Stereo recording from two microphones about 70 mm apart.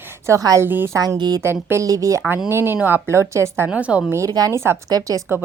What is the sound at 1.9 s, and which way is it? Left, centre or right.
Speech, right.